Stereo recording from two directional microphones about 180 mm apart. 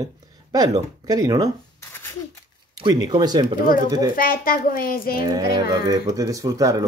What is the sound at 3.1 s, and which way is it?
Speech, 25° right (ahead or behind).